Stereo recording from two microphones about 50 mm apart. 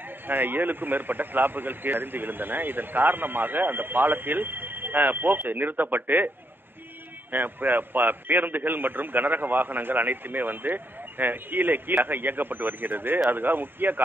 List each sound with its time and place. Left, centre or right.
0.3 s a man's voice: right